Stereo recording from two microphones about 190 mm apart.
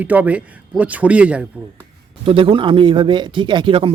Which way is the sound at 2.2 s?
25° right (ahead or behind).